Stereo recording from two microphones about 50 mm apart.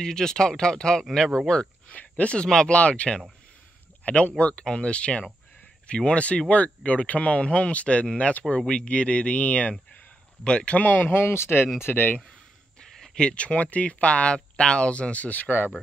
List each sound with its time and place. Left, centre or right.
0.0 s speech: centre
1.5 s speech: left
2.3 s speech: centre; by 11.7 s left
11.8 s speech: left
12.8 s speech: centre; by 15.7 s left